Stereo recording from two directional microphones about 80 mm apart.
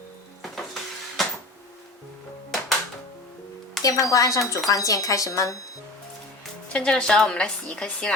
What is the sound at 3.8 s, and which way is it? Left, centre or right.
Speech, left.